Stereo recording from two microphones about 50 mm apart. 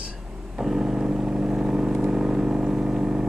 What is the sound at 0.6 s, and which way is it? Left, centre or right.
Vehicle, centre.